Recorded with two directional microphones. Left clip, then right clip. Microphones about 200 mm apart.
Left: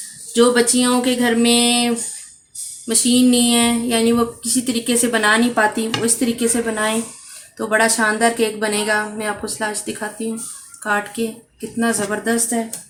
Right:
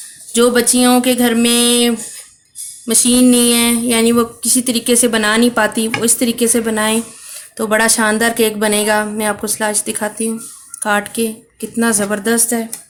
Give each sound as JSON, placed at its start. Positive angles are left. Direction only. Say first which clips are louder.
{"t": 0.3, "sound": "speech", "louder": "right 2 dB", "side_deg": -60}